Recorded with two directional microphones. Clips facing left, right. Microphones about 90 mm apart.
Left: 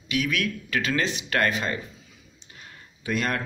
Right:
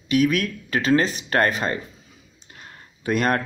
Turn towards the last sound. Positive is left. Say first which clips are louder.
# right 6 dB
turn(degrees=-45)  # may be behind; listen again after turning